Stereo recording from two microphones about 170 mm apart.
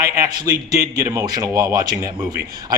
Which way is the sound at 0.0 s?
20° right (ahead or behind).